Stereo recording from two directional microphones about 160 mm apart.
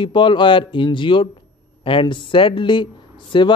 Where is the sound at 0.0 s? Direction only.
30° left (ahead or behind).